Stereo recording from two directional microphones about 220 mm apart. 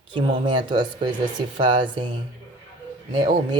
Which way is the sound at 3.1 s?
20° right (ahead or behind).